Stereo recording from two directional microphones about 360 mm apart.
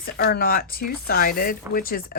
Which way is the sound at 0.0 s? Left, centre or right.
Left.